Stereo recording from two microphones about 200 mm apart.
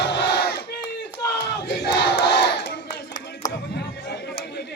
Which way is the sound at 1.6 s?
55° left (ahead or behind).